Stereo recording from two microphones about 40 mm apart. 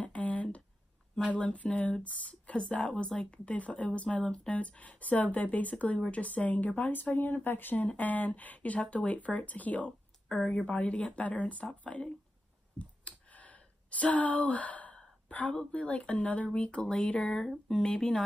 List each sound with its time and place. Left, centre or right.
0.0 s a sound: left
1.3 s speech: left
12.7 s clicking: left
15.2 s a woman's voice: left; by 17.9 s centre